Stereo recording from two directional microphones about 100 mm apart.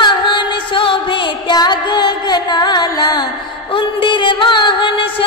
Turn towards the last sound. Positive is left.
turn(degrees=55)  # may be behind; listen again after turning